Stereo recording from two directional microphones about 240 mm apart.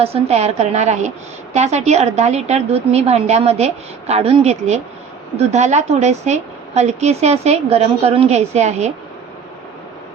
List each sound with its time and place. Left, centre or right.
0.0 s a woman's voice: right